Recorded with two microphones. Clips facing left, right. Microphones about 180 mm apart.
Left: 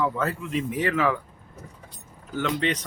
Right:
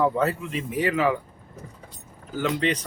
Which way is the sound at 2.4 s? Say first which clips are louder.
Right 1 dB; centre (ahead or behind).